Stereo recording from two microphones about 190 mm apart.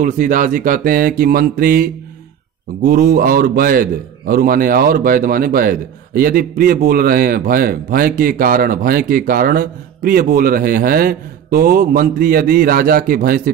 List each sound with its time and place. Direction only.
0.0 s a man's voice: 45° right (ahead or behind)